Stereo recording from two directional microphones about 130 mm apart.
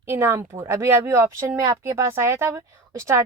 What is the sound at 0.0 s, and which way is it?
Speech, 20° right (ahead or behind).